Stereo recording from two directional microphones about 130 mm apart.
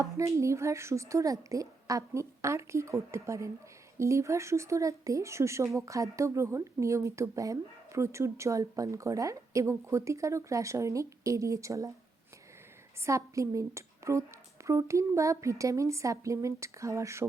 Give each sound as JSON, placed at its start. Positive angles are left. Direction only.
{"t": 0.0, "sound": "speech", "side_deg": -25}
{"t": 13.0, "sound": "speech", "side_deg": -25}